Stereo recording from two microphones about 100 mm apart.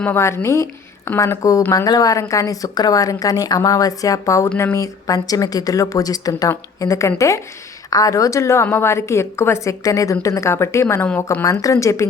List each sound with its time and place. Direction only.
0.2 s a woman's voice: 30° left (ahead or behind)
11.6 s a woman's voice: 30° left (ahead or behind)